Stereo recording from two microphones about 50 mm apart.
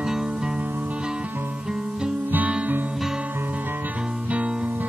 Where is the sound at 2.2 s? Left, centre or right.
Right.